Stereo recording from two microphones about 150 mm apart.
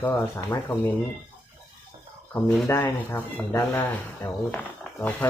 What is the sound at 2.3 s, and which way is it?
Speech, 15° left (ahead or behind).